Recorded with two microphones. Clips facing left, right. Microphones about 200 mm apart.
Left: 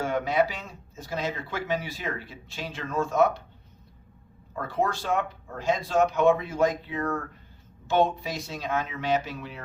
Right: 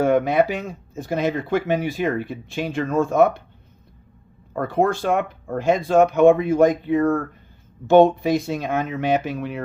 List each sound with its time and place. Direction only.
0.0 s speech: 55° right (ahead or behind)
4.5 s speech: 55° right (ahead or behind)